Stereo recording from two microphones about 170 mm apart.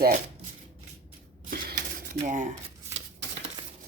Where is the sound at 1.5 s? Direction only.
55° right (ahead or behind).